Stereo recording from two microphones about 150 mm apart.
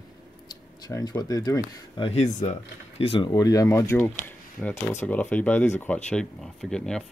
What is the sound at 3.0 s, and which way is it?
Speech, 35° left (ahead or behind).